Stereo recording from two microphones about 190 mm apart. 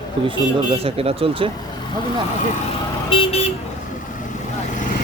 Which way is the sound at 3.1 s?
30° left (ahead or behind).